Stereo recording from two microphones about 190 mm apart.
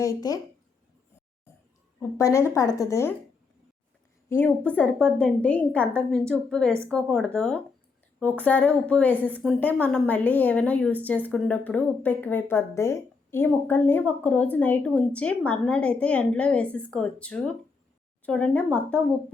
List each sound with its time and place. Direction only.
0.0 s speech: 20° left (ahead or behind)
2.0 s a woman's voice: 15° left (ahead or behind)
4.3 s a woman's voice: 10° left (ahead or behind)